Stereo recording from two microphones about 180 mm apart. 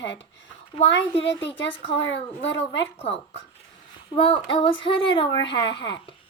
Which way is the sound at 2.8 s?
30° left (ahead or behind).